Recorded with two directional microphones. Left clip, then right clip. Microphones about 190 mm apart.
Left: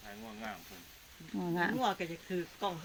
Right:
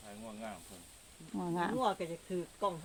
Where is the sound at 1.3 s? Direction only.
10° left (ahead or behind).